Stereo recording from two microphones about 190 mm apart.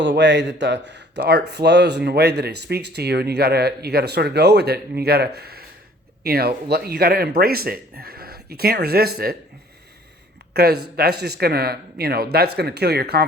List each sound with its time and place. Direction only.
0.2 s a man's voice: 65° right (ahead or behind)
10.5 s speech: 55° right (ahead or behind)